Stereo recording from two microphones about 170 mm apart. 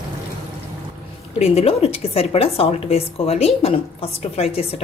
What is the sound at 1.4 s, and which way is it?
A woman's voice, 35° left (ahead or behind).